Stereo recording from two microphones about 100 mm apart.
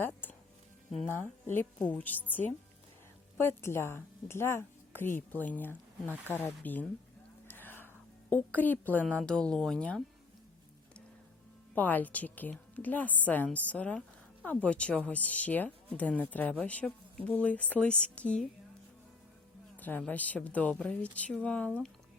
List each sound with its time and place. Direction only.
0.0 s music: 20° left (ahead or behind)
1.0 s a woman's voice: 20° left (ahead or behind)
3.3 s a woman's voice: 25° left (ahead or behind)
7.4 s a sound: 20° left (ahead or behind)
8.3 s a woman's voice: 15° left (ahead or behind)
11.7 s a woman's voice: 15° left (ahead or behind)
19.7 s music: 15° left (ahead or behind)
20.1 s a woman's voice: 15° left (ahead or behind)